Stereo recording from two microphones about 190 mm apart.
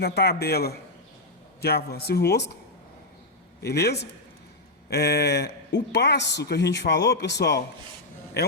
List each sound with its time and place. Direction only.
0.0 s speech: 60° left (ahead or behind)
3.6 s speech: 60° left (ahead or behind)